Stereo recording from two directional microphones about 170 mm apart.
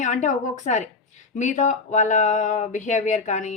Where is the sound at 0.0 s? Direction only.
45° left (ahead or behind).